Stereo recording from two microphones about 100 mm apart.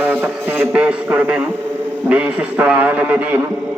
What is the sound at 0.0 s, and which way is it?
A man's voice, 20° right (ahead or behind).